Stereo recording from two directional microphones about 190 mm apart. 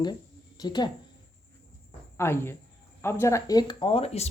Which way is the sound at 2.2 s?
15° left (ahead or behind).